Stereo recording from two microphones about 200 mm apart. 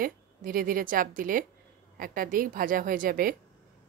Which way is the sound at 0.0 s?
45° right (ahead or behind).